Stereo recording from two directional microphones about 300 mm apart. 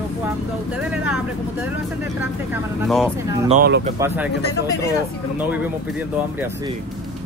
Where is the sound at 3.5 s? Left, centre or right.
Right.